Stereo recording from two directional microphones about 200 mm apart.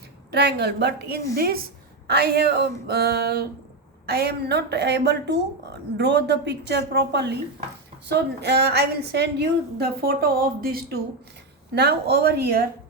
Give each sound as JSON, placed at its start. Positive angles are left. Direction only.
{"t": 0.3, "sound": "a woman's voice", "side_deg": -55}